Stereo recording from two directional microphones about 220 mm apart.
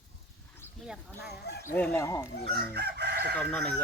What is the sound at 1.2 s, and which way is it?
Speech, 50° left (ahead or behind).